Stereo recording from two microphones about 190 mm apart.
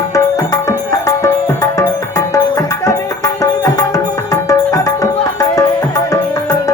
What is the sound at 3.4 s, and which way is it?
Tabla, 15° left (ahead or behind).